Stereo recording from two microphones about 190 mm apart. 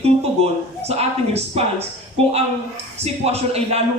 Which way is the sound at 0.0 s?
35° right (ahead or behind).